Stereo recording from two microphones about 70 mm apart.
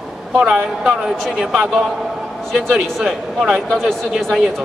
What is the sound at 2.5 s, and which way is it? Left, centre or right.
A man's voice, centre.